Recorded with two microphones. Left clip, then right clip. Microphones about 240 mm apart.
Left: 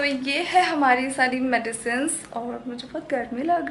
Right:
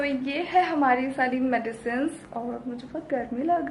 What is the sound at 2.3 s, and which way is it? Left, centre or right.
Speech, right.